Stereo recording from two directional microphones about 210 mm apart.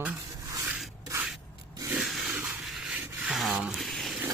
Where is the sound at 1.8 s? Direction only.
10° right (ahead or behind).